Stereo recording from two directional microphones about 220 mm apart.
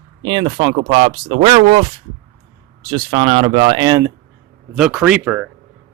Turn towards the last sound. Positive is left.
turn(degrees=-5)  # may be behind; listen again after turning